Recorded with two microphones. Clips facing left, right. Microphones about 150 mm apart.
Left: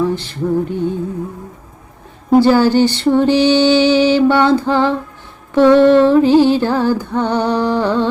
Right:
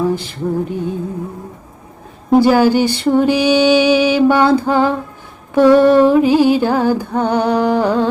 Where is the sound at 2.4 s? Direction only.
10° right (ahead or behind).